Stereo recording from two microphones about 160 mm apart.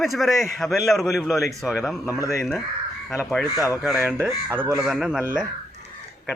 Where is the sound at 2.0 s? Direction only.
20° left (ahead or behind).